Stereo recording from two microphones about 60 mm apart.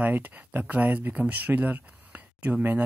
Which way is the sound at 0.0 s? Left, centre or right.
Right.